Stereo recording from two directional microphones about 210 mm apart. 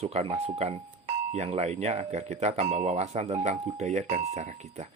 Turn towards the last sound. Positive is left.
turn(degrees=-35)  # may be behind; listen again after turning